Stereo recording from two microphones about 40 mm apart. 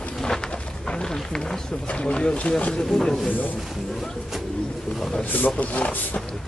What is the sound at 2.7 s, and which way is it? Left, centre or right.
Speech, centre.